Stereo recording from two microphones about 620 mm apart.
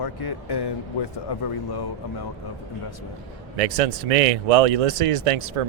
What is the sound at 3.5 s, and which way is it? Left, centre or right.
Speech, right.